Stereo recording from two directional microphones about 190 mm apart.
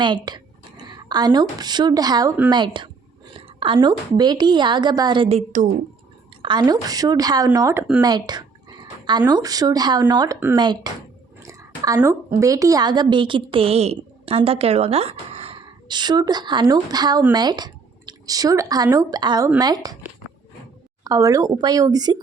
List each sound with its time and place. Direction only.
0.0 s a woman's voice: 25° right (ahead or behind)
6.4 s a woman's voice: 25° right (ahead or behind)
11.4 s a sound: 20° right (ahead or behind)
12.4 s a woman's voice: 15° right (ahead or behind)